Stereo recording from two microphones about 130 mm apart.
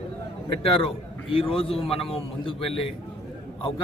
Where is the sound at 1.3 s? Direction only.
45° left (ahead or behind).